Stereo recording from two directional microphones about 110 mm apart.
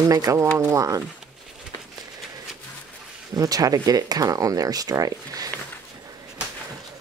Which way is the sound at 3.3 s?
35° right (ahead or behind).